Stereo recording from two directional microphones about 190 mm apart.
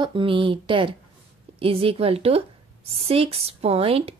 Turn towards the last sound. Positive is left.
turn(degrees=-30)  # may be behind; listen again after turning